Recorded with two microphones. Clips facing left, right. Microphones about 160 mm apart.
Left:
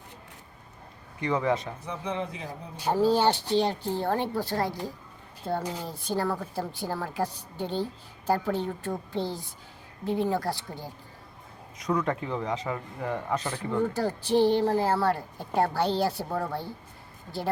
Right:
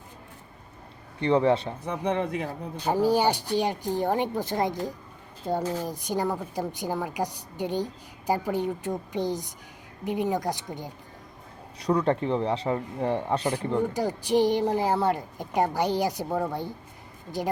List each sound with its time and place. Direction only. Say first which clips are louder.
1.2 s speech: right 5 dB; 30° right (ahead or behind)
1.9 s speech: right 6 dB; 60° right (ahead or behind)
2.9 s a woman's voice: even; 15° right (ahead or behind)
11.8 s speech: right 4 dB; 35° right (ahead or behind)
13.4 s a woman's voice: right 2 dB; 10° right (ahead or behind)